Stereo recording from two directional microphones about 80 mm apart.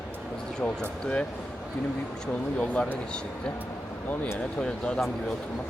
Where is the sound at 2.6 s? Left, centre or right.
Centre.